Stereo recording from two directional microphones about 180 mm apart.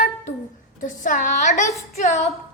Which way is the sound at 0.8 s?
45° left (ahead or behind).